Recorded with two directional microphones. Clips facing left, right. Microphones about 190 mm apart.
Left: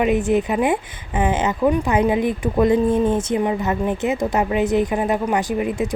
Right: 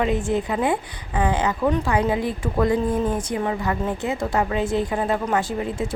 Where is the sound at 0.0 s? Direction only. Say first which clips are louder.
Left 4 dB; 20° left (ahead or behind).